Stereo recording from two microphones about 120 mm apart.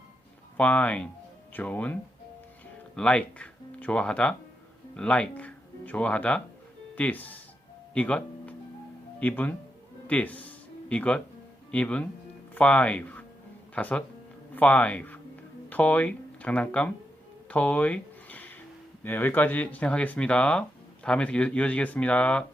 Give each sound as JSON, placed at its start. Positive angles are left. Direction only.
{"t": 0.5, "sound": "speech", "side_deg": 10}
{"t": 17.5, "sound": "a sound", "side_deg": 15}
{"t": 19.0, "sound": "speech", "side_deg": 15}